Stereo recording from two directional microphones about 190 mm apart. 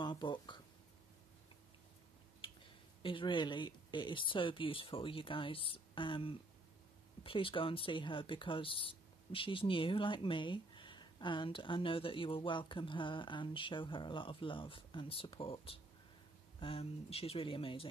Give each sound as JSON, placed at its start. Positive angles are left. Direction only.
{"t": 0.0, "sound": "speech", "side_deg": 25}
{"t": 3.0, "sound": "speech", "side_deg": 25}